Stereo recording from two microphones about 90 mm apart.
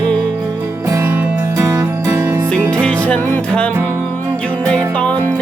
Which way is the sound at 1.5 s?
35° right (ahead or behind).